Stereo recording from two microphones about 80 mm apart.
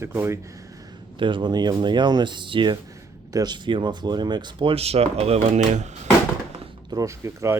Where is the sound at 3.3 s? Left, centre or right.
Right.